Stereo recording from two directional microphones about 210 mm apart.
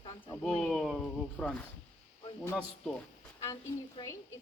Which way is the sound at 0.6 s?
Centre (ahead or behind).